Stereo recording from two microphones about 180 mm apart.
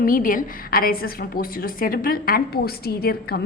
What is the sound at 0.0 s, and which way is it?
A woman's voice, 50° left (ahead or behind).